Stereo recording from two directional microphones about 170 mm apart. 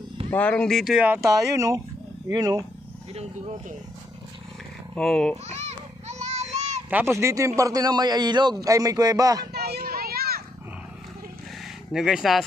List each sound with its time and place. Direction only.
0.3 s speech: 10° left (ahead or behind); by 2.6 s 20° right (ahead or behind)
3.2 s speech: 40° right (ahead or behind)
4.9 s speech: 5° left (ahead or behind)
5.5 s child singing: 40° right (ahead or behind)
7.2 s speech: 15° right (ahead or behind)
9.5 s vehicle: 70° right (ahead or behind)
11.9 s speech: 5° right (ahead or behind)